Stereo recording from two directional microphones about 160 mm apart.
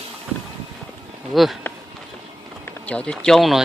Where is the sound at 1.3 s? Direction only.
Centre (ahead or behind).